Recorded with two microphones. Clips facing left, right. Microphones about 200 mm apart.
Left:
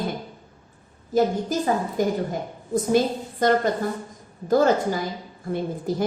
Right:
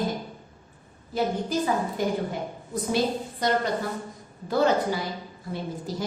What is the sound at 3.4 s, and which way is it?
Speech, 50° left (ahead or behind).